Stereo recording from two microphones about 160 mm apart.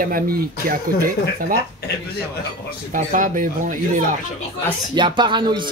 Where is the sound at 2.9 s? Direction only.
55° right (ahead or behind).